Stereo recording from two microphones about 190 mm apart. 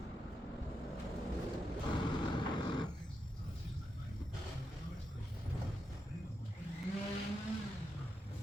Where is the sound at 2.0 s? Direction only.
25° left (ahead or behind).